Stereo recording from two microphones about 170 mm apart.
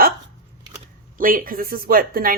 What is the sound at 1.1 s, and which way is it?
A woman's voice, 55° right (ahead or behind).